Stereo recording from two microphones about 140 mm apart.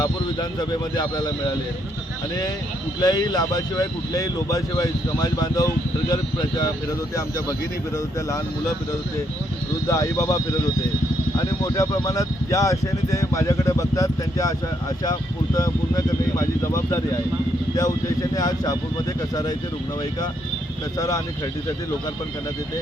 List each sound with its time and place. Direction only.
0.0 s speech: 30° left (ahead or behind)
3.0 s speech: 30° left (ahead or behind)
9.9 s speech: 25° left (ahead or behind)